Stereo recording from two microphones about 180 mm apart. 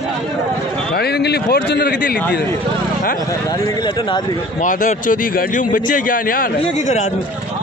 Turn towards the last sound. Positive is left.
turn(degrees=40)  # may be behind; listen again after turning